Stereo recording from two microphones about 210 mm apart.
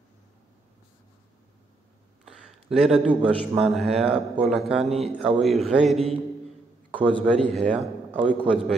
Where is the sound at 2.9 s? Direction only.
5° right (ahead or behind).